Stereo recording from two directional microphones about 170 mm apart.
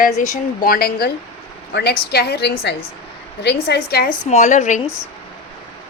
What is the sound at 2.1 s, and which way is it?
Speech, 70° left (ahead or behind).